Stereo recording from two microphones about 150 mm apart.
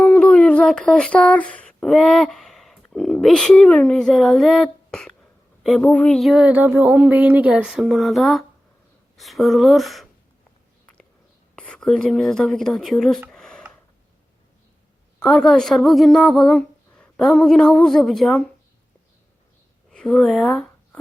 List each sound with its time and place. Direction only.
0.0 s a sound: 5° left (ahead or behind)
5.6 s a woman's voice: 5° left (ahead or behind)
11.5 s a woman's voice: 5° left (ahead or behind)
13.3 s a sound: 5° left (ahead or behind)
15.2 s a woman's voice: 5° left (ahead or behind)
19.9 s speech: 5° left (ahead or behind)